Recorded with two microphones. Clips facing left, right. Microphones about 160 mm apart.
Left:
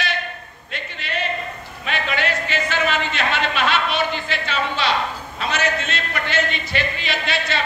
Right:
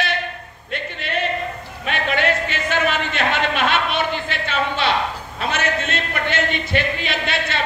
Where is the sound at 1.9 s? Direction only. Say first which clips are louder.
Right 3 dB; 55° right (ahead or behind).